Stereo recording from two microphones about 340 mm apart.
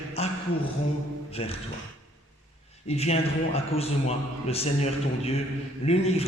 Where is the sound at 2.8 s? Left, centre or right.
Centre.